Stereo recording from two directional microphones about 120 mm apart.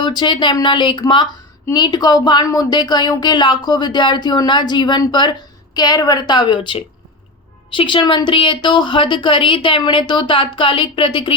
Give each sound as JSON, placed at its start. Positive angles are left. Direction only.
{"t": 0.0, "sound": "a woman's voice", "side_deg": 40}